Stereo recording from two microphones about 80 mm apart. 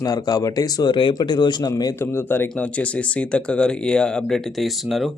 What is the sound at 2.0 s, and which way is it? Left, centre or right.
Speech, left.